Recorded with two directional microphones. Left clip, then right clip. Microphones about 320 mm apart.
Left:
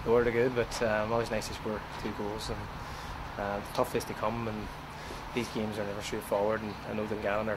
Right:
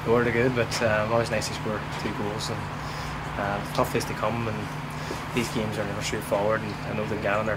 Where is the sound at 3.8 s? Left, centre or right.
Centre.